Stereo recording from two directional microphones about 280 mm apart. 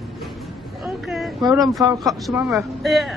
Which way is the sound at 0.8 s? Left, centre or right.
Centre.